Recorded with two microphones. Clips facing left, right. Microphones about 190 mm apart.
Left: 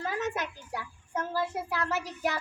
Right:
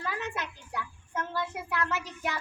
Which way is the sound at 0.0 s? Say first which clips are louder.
Left 3 dB; 40° left (ahead or behind).